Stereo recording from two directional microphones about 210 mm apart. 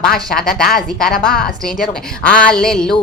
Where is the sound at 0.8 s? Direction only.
Centre (ahead or behind).